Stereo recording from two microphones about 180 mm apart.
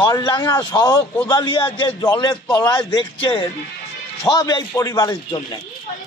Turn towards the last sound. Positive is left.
turn(degrees=20)  # may be behind; listen again after turning